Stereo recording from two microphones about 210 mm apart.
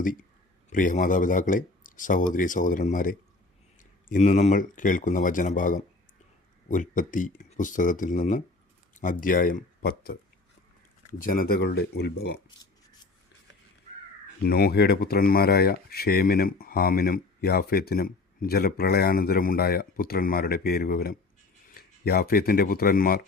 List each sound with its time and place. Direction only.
0.0 s a man's voice: 40° left (ahead or behind)
11.2 s speech: 45° left (ahead or behind)
14.4 s speech: 50° left (ahead or behind)